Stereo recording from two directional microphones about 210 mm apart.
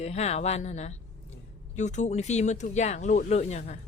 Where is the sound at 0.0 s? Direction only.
30° left (ahead or behind).